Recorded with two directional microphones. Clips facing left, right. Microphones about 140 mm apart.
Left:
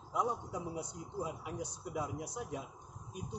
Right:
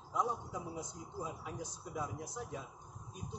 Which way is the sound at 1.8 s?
10° left (ahead or behind).